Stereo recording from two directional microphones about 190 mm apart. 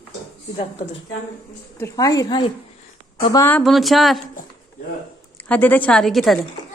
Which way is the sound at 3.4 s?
5° left (ahead or behind).